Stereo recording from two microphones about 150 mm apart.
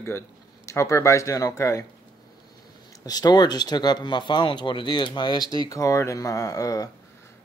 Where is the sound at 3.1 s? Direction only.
25° left (ahead or behind).